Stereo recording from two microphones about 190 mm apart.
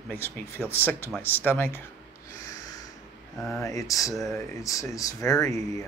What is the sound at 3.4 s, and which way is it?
Speech, 5° left (ahead or behind).